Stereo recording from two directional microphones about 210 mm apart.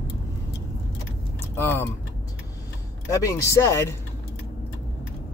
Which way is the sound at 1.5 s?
10° left (ahead or behind).